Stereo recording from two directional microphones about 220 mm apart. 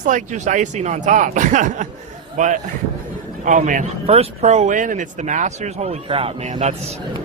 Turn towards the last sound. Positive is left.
turn(degrees=-25)  # may be behind; listen again after turning